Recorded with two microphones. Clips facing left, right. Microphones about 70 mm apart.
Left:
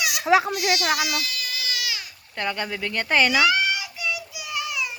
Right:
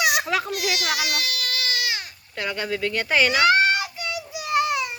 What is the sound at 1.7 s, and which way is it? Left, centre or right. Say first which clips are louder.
Baby cry: right 3 dB; right.